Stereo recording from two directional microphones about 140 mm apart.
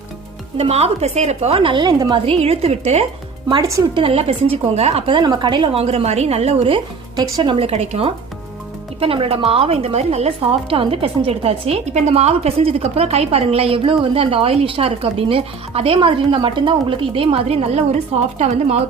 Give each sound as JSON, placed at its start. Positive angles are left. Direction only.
{"t": 0.5, "sound": "a woman's voice", "side_deg": -50}
{"t": 3.5, "sound": "speech", "side_deg": -25}
{"t": 3.9, "sound": "a woman's voice", "side_deg": -45}
{"t": 7.7, "sound": "a woman's voice", "side_deg": -50}